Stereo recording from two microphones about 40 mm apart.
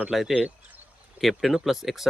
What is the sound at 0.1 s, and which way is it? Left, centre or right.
Speech, centre.